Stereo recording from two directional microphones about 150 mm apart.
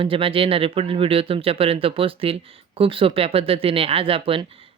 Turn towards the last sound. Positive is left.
turn(degrees=-40)  # may be behind; listen again after turning